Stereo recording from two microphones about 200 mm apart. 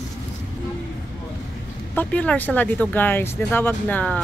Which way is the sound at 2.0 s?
10° left (ahead or behind).